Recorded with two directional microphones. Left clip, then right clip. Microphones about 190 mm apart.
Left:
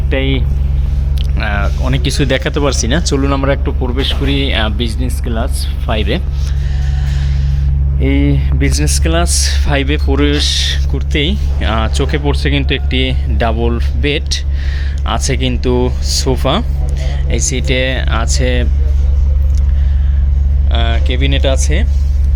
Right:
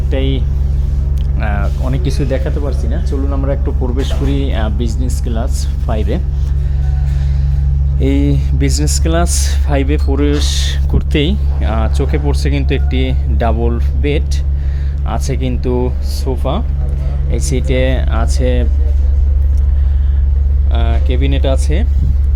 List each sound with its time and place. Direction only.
0.1 s speech: 10° right (ahead or behind)
2.6 s speech: 20° left (ahead or behind)
3.2 s speech: 10° left (ahead or behind)
3.5 s speech: 5° right (ahead or behind)
8.0 s speech: 15° right (ahead or behind)
11.6 s speech: 5° right (ahead or behind); by 16.6 s 15° left (ahead or behind)
17.0 s speech: 5° right (ahead or behind)
20.7 s speech: 5° right (ahead or behind)